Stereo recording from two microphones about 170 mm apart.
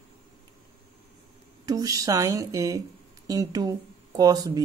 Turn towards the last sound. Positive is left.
turn(degrees=-20)  # may be behind; listen again after turning